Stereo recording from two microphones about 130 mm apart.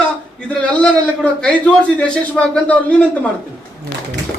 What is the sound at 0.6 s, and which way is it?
A man's voice, 10° left (ahead or behind).